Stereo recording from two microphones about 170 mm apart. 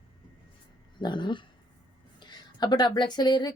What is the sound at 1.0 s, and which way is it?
Speech, 25° left (ahead or behind).